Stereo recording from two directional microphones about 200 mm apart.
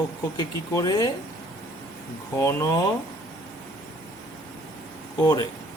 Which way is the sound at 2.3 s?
15° left (ahead or behind).